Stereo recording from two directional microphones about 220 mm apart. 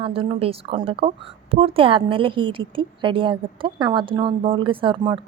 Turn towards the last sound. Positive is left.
turn(degrees=-20)  # may be behind; listen again after turning